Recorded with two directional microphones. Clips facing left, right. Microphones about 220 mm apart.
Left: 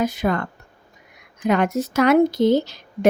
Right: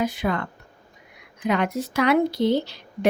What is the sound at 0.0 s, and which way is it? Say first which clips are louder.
Speech: left 3 dB; 45° left (ahead or behind).